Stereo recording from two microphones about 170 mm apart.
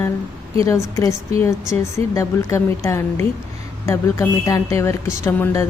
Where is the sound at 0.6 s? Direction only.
20° left (ahead or behind).